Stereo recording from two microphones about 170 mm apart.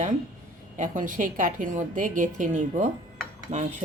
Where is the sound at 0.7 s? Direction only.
50° right (ahead or behind).